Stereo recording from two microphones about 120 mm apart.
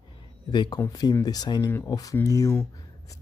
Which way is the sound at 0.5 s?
40° left (ahead or behind).